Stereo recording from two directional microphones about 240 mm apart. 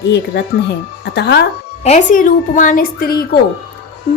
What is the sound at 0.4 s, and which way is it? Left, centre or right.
Speech, left.